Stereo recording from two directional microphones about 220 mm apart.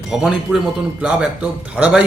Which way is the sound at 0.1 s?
5° right (ahead or behind).